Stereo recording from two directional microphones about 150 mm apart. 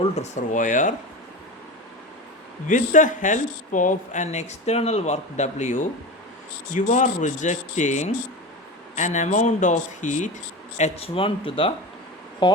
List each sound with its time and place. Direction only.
0.2 s speech: 60° left (ahead or behind)
2.6 s speech: 60° left (ahead or behind); by 12.6 s 30° left (ahead or behind)